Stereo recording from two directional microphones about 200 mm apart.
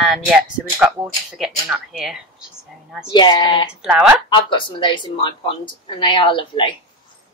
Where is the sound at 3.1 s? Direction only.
20° left (ahead or behind).